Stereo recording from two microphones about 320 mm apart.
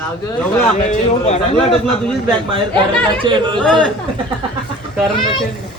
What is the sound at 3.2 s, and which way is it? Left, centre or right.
Speech, centre.